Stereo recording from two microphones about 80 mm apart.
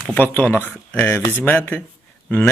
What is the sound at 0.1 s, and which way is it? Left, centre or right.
Speech, left.